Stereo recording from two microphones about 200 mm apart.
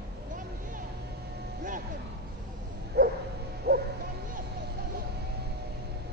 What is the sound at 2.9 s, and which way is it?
Bow-wow, 55° right (ahead or behind).